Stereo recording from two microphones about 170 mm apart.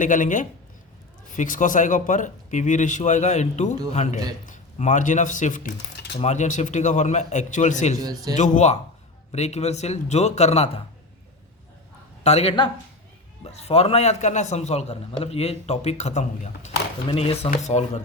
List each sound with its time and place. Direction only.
0.0 s speech: 50° left (ahead or behind)
8.0 s a man's voice: 20° right (ahead or behind)
8.4 s a man's voice: 45° left (ahead or behind)
12.2 s a man's voice: 40° left (ahead or behind)